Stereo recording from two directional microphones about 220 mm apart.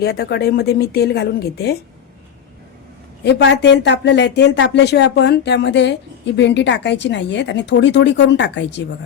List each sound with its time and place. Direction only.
0.0 s speech: 45° left (ahead or behind)
3.2 s speech: 50° left (ahead or behind)